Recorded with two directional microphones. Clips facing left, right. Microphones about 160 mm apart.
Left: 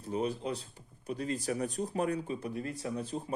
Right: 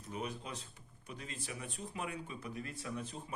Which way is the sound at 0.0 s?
30° left (ahead or behind).